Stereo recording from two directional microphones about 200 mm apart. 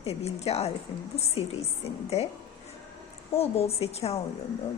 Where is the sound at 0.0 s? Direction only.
30° left (ahead or behind).